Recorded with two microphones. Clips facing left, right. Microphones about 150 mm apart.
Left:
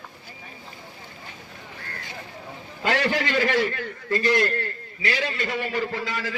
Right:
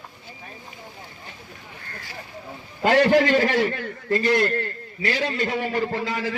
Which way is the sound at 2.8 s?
45° right (ahead or behind).